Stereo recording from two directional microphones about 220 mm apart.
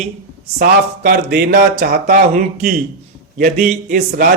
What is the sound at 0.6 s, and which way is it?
Speech, 45° right (ahead or behind).